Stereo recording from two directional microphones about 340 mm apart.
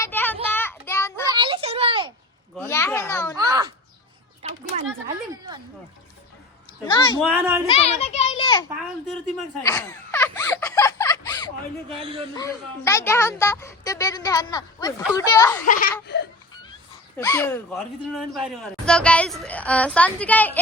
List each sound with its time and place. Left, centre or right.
0.0 s child singing: centre
1.3 s a sound: centre
2.6 s speech: centre
3.3 s speech: centre
4.4 s a sound: centre
6.8 s speech: centre
7.2 s a woman's voice: centre
7.7 s speech: centre
9.6 s a sound: centre
11.9 s speech: centre
12.4 s speech: centre
15.6 s speech: left
17.2 s a woman's voice: centre